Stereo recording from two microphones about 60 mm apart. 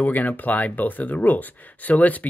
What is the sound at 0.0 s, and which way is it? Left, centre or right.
Speech, left.